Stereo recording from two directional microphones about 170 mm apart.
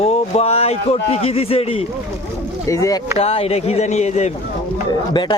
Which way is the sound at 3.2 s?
35° left (ahead or behind).